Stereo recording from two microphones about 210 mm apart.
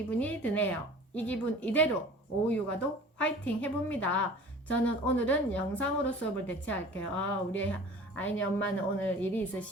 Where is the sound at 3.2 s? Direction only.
5° left (ahead or behind).